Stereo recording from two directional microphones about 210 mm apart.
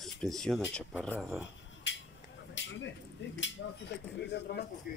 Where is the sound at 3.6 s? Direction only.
60° left (ahead or behind).